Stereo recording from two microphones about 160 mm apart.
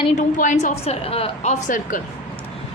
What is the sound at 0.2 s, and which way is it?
A woman's voice, 50° left (ahead or behind).